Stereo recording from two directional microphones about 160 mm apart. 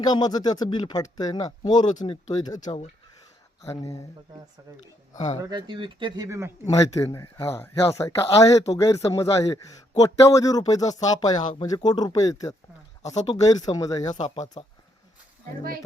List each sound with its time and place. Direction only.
0.0 s speech: 25° left (ahead or behind)
3.6 s speech: 20° left (ahead or behind)
5.1 s speech: 45° left (ahead or behind)
5.5 s speech: 30° right (ahead or behind)
6.2 s speech: 20° right (ahead or behind)
6.7 s speech: 20° left (ahead or behind)
13.0 s speech: 45° left (ahead or behind)
13.3 s speech: 25° left (ahead or behind)
14.2 s speech: 45° left (ahead or behind)